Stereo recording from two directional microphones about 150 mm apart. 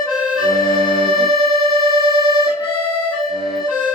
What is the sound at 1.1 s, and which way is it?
Music, 35° right (ahead or behind).